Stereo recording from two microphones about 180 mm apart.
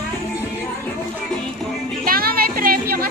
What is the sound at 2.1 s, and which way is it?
Music, 55° right (ahead or behind).